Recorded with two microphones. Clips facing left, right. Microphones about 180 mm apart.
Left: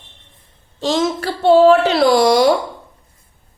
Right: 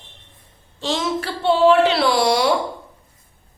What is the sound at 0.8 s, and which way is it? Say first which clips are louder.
A woman's voice: left 5 dB; 40° left (ahead or behind).